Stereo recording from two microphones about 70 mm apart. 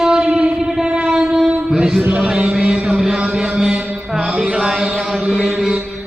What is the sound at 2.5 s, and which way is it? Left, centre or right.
Mantra, centre.